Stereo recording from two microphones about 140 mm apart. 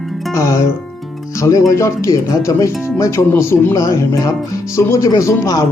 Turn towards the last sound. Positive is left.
turn(degrees=20)  # may be behind; listen again after turning